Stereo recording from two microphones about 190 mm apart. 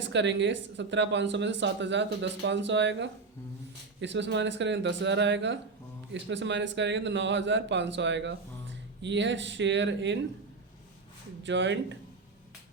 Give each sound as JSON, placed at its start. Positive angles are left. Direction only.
{"t": 0.0, "sound": "speech", "side_deg": -70}
{"t": 11.4, "sound": "speech", "side_deg": -70}